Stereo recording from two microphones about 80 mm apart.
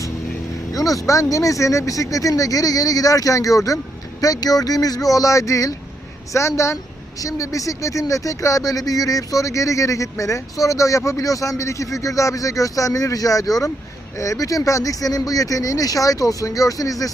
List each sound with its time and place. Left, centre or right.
0.7 s speech: left